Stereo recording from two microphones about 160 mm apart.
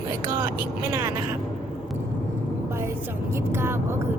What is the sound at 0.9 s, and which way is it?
Speech, 20° right (ahead or behind).